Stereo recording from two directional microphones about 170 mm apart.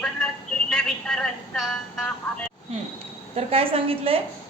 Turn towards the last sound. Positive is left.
turn(degrees=-35)  # may be behind; listen again after turning